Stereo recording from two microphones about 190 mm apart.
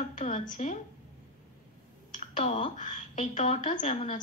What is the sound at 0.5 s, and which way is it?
Speech, 40° left (ahead or behind).